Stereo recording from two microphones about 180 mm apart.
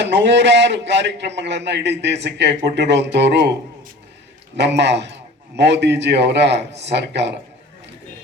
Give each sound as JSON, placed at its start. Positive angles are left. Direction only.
{"t": 0.0, "sound": "a man's voice", "side_deg": -75}
{"t": 4.5, "sound": "a man's voice", "side_deg": -70}